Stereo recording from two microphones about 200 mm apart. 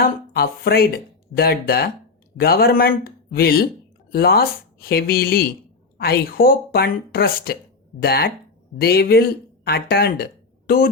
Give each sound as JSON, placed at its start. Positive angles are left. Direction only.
{"t": 0.0, "sound": "speech", "side_deg": 50}